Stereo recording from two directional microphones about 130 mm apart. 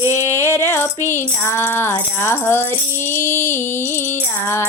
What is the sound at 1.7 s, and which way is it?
Music, 20° left (ahead or behind).